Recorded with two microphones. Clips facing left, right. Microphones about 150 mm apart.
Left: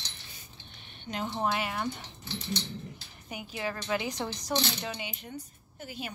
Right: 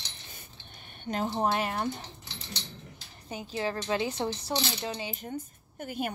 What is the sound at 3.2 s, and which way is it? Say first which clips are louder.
Speech: right 3 dB; 30° right (ahead or behind).